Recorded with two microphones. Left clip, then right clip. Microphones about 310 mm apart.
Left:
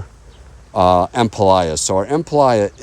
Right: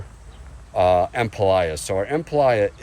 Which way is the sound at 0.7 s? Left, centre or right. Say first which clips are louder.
Left 4 dB; left.